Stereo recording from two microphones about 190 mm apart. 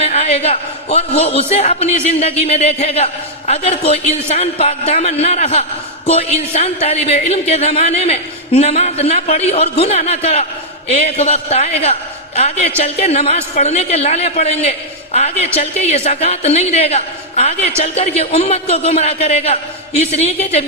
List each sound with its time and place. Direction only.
0.0 s a man's voice: 35° left (ahead or behind)